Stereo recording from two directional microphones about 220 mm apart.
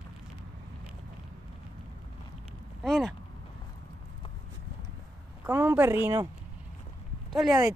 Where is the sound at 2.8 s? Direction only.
Centre (ahead or behind).